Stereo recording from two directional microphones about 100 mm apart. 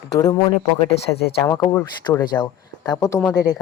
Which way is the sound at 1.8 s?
40° left (ahead or behind).